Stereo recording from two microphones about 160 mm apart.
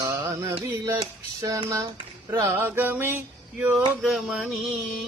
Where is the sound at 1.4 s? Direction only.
20° right (ahead or behind).